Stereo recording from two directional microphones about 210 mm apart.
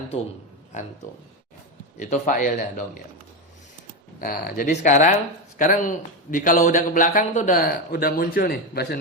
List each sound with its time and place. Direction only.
2.0 s speech: 35° left (ahead or behind)
4.2 s a man's voice: 45° left (ahead or behind)